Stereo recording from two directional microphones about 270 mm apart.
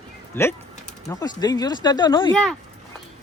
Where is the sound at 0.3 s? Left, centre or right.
Centre.